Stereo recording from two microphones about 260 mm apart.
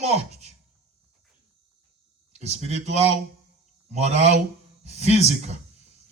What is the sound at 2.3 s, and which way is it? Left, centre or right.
Speech, right.